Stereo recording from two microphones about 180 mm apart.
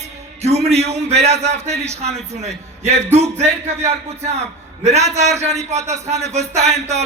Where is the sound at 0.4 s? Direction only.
35° right (ahead or behind).